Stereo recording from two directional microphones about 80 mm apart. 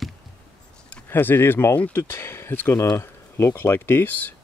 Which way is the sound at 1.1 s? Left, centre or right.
Left.